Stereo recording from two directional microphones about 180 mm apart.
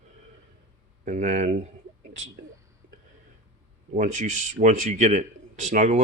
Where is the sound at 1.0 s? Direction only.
40° right (ahead or behind).